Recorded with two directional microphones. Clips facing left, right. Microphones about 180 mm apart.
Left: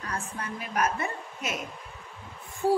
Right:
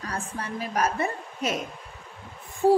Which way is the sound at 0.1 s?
35° right (ahead or behind).